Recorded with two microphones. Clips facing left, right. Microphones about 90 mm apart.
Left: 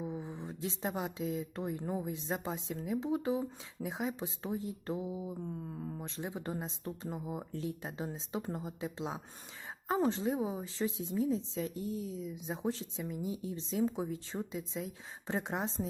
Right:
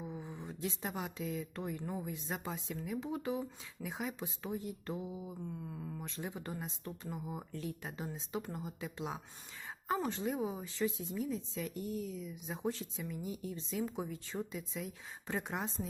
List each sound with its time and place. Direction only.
0.0 s a sound: 20° left (ahead or behind)
0.3 s a woman's voice: 30° left (ahead or behind)
5.5 s speech: 40° left (ahead or behind)
6.0 s a woman's voice: 25° left (ahead or behind)